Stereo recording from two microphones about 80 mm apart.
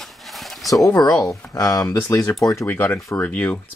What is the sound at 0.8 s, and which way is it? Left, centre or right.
Speech, left.